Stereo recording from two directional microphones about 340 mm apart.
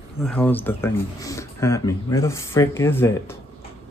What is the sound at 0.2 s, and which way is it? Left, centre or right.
Speech, centre.